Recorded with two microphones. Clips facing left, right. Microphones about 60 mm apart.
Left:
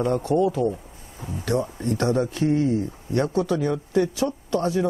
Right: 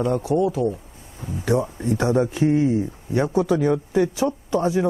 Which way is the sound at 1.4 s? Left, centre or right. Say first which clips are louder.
Right 3 dB; centre.